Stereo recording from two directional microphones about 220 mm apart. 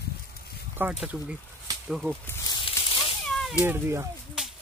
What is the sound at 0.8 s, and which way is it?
Speech, 10° right (ahead or behind).